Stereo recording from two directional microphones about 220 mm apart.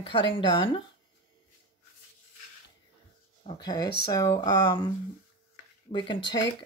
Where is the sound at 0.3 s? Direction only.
25° left (ahead or behind).